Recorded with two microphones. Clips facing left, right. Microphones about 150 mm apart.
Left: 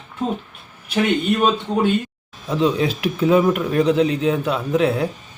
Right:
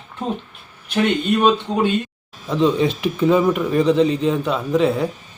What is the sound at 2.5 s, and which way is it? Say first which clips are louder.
A man's voice: right 2 dB; centre (ahead or behind).